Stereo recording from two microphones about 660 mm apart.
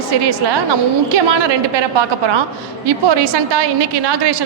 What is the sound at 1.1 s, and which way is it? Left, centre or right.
A woman's voice, right.